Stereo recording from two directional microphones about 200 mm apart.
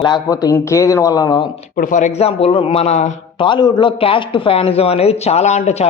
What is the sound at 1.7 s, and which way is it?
Speech, 40° left (ahead or behind).